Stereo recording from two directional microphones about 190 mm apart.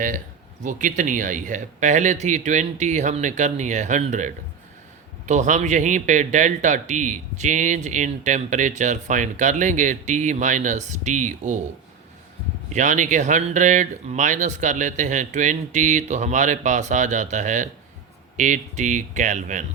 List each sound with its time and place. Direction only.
0.6 s speech: 40° right (ahead or behind)
12.7 s speech: 40° right (ahead or behind)